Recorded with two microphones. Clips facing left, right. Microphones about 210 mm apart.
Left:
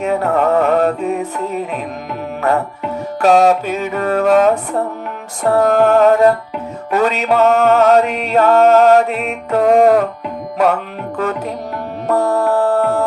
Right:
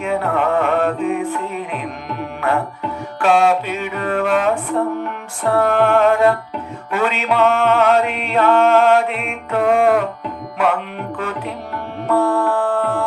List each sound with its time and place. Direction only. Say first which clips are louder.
0.0 s music: left 4 dB; 40° left (ahead or behind)